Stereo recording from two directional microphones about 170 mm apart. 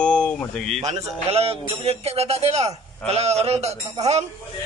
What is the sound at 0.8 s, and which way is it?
A man's voice, 35° right (ahead or behind).